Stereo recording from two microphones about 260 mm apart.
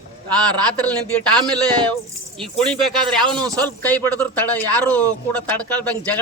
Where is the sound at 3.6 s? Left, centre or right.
Centre.